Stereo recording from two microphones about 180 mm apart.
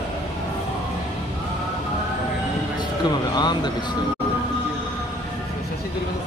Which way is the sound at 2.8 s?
25° left (ahead or behind).